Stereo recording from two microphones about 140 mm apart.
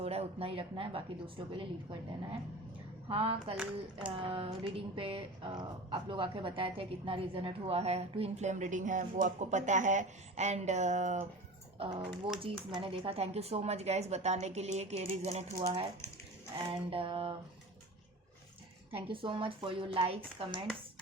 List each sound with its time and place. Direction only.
0.0 s speech: 45° right (ahead or behind)
3.1 s speech: 40° right (ahead or behind); by 11.2 s 55° right (ahead or behind)
11.8 s speech: 40° right (ahead or behind)
19.0 s speech: 40° right (ahead or behind)